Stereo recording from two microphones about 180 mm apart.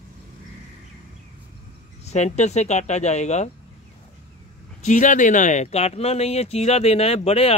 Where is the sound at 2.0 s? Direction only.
40° left (ahead or behind).